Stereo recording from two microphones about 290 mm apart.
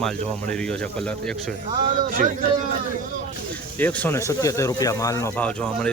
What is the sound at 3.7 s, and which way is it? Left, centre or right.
Speech, centre.